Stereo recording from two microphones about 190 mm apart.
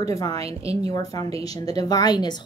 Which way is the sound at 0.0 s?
20° left (ahead or behind).